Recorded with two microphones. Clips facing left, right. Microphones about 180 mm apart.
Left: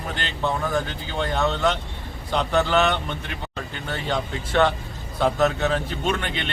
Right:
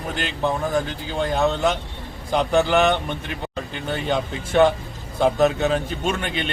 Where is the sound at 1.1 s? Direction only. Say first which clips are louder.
Right 3 dB; 10° right (ahead or behind).